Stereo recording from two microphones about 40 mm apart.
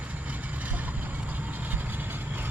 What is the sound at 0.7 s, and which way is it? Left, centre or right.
Vehicle, right.